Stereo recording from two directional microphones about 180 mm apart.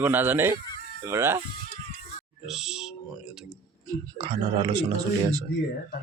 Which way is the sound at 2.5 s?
5° right (ahead or behind).